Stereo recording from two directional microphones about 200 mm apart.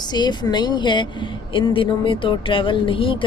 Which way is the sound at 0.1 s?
20° left (ahead or behind).